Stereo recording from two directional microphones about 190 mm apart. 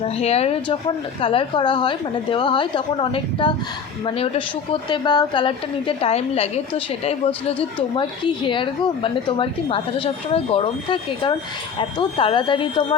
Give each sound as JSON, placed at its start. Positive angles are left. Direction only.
{"t": 0.1, "sound": "a woman's voice", "side_deg": 35}